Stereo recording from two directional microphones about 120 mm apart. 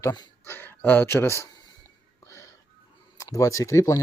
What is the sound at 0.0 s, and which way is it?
Speech, 35° left (ahead or behind).